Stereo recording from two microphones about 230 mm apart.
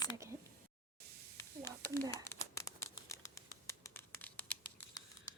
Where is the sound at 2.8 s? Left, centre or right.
Centre.